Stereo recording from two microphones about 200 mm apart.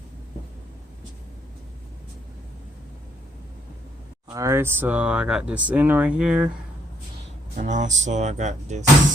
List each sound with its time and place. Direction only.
4.3 s speech: 15° right (ahead or behind)
7.5 s speech: 40° right (ahead or behind)